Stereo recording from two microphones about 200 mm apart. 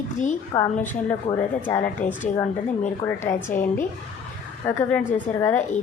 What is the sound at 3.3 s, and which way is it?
Speech, 10° left (ahead or behind).